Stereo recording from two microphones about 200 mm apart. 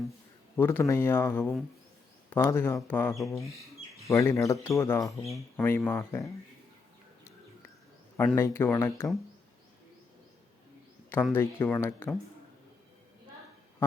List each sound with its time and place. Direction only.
0.5 s speech: 10° left (ahead or behind)
5.2 s speech: centre (ahead or behind)
5.6 s speech: 10° left (ahead or behind)
8.4 s speech: 10° left (ahead or behind)
11.1 s speech: 10° left (ahead or behind)